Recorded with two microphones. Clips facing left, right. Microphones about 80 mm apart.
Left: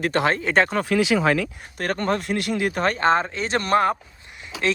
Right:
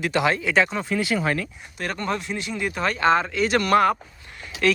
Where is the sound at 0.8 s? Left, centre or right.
Left.